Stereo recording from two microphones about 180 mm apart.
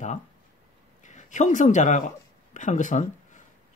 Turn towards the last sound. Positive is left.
turn(degrees=45)  # may be behind; listen again after turning